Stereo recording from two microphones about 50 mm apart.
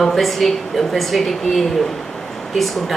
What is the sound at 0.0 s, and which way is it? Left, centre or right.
A woman's voice, centre.